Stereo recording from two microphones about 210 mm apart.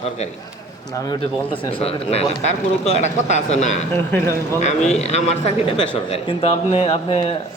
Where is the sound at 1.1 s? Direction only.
25° left (ahead or behind).